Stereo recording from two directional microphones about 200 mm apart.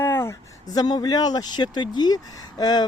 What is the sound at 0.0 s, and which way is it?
Speech, 10° left (ahead or behind).